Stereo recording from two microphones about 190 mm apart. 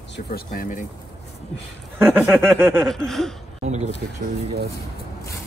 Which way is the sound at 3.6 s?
35° right (ahead or behind).